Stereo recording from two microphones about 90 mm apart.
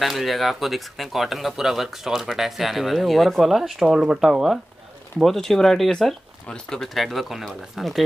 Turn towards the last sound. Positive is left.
turn(degrees=0)  # may be behind; listen again after turning